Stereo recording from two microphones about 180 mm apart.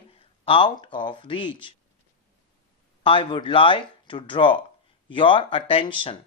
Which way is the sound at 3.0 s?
30° left (ahead or behind).